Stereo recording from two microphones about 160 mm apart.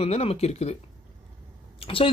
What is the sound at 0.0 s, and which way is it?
Speech, 40° left (ahead or behind).